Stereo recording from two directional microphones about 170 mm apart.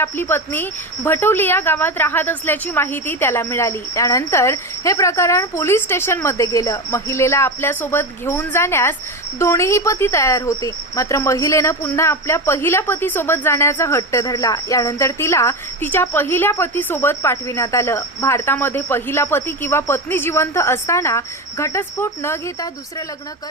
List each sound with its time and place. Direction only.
0.0 s speech: 15° left (ahead or behind)